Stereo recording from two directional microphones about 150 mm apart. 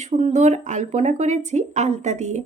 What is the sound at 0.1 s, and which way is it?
Speech, 45° right (ahead or behind).